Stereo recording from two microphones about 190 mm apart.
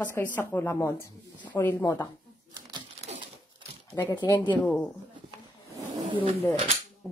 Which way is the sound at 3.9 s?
10° left (ahead or behind).